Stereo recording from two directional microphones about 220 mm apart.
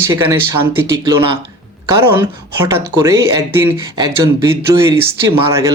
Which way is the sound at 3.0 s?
15° right (ahead or behind).